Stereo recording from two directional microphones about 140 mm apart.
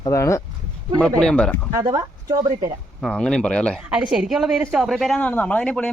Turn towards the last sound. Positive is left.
turn(degrees=5)  # may be behind; listen again after turning